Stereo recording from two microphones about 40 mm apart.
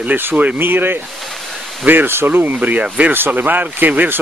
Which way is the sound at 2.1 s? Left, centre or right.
Right.